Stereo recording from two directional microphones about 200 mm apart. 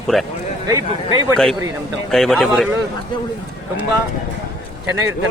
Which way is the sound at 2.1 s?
Centre (ahead or behind).